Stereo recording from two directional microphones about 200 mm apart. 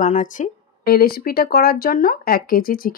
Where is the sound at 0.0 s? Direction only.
40° left (ahead or behind).